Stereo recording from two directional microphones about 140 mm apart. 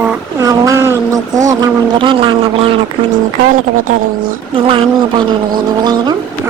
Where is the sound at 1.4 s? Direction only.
35° right (ahead or behind).